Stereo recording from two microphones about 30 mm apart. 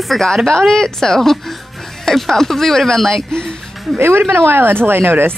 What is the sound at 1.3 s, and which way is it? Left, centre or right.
Music, centre.